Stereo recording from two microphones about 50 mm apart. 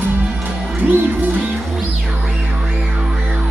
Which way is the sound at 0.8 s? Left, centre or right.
Right.